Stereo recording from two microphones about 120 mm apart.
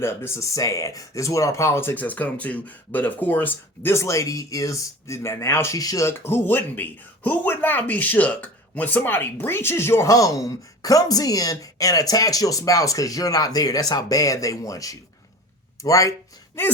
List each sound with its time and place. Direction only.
0.0 s speech: 20° left (ahead or behind)